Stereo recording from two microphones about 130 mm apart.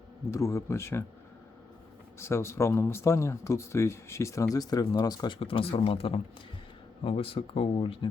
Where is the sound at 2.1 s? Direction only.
20° left (ahead or behind).